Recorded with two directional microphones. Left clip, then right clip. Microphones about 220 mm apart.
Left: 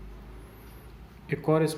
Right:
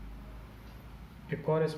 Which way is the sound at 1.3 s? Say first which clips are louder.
Left 5 dB; 50° left (ahead or behind).